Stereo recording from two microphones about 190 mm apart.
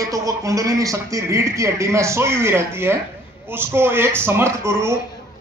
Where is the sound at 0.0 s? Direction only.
15° right (ahead or behind).